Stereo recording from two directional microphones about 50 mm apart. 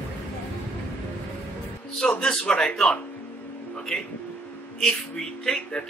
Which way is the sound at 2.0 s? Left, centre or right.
Centre.